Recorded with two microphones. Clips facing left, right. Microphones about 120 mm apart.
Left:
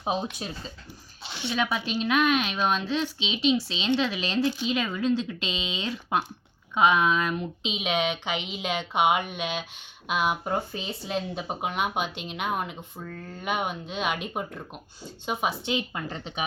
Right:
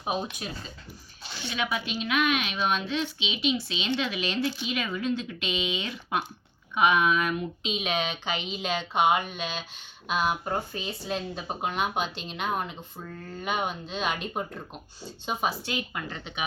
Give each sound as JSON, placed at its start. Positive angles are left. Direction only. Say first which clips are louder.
{"t": 0.0, "sound": "speech", "louder": "left 2 dB", "side_deg": 30}
{"t": 1.2, "sound": "a sound", "louder": "left 5 dB", "side_deg": 25}
{"t": 1.5, "sound": "a woman's voice", "louder": "left 3 dB", "side_deg": 35}
{"t": 13.2, "sound": "speech", "louder": "right 1 dB", "side_deg": 0}
{"t": 13.5, "sound": "speech", "louder": "left 1 dB", "side_deg": 10}